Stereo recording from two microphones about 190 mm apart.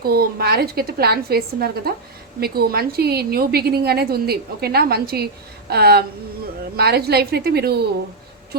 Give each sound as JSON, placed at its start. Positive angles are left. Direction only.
{"t": 0.0, "sound": "a woman's voice", "side_deg": -55}